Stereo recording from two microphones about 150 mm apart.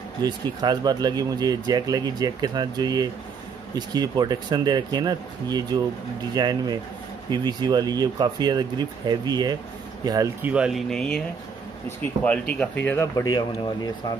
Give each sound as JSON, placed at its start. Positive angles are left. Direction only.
{"t": 0.2, "sound": "speech", "side_deg": -25}
{"t": 10.4, "sound": "speech", "side_deg": -5}